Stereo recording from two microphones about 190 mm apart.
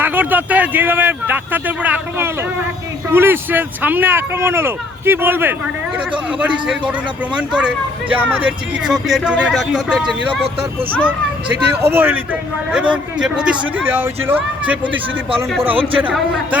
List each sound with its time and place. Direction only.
0.0 s speech: 10° right (ahead or behind)
15.7 s a man's voice: 30° right (ahead or behind)
16.0 s speech: 5° right (ahead or behind)